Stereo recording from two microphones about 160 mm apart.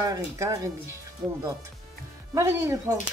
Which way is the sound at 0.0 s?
20° right (ahead or behind).